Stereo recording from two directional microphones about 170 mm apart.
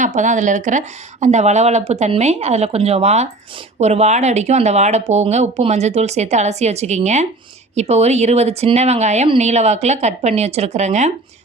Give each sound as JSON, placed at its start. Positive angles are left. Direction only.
{"t": 0.0, "sound": "speech", "side_deg": -45}